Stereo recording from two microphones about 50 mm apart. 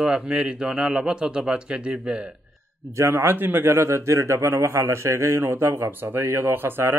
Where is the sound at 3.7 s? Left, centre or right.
Right.